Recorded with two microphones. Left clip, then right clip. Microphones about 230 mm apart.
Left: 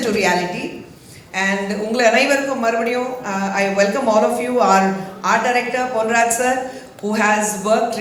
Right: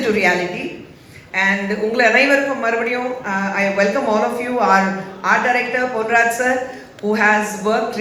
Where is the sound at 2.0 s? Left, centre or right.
Left.